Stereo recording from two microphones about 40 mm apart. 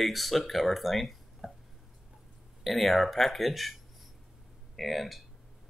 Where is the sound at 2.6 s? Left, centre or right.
Centre.